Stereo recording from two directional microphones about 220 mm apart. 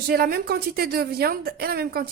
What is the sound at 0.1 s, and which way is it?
Speech, 45° right (ahead or behind).